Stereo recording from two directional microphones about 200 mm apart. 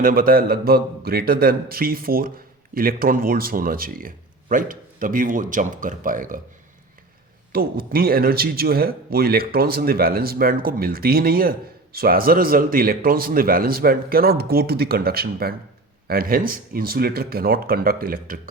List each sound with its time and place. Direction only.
0.0 s a man's voice: 45° right (ahead or behind)
7.5 s a man's voice: 50° right (ahead or behind)